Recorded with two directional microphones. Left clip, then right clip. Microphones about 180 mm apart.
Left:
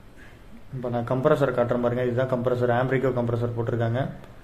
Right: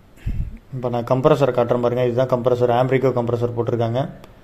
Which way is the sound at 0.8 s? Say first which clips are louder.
Right 6 dB; 35° right (ahead or behind).